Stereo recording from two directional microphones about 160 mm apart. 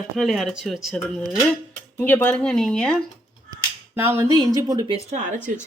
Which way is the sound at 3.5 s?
15° right (ahead or behind).